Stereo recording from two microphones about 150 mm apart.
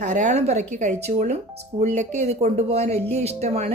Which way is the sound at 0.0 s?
50° right (ahead or behind).